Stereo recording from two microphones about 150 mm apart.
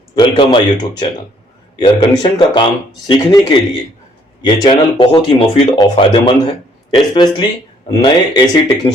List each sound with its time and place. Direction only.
0.5 s speech: 30° left (ahead or behind)